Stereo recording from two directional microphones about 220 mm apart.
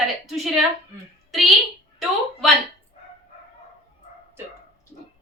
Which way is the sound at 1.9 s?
Centre (ahead or behind).